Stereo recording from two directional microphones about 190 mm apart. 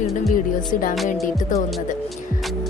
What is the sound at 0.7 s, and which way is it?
Speech, 45° left (ahead or behind).